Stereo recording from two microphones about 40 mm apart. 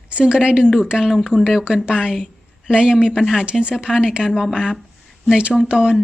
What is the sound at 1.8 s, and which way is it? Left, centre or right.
Speech, right.